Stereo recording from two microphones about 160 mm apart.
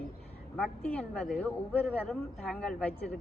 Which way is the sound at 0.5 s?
5° left (ahead or behind).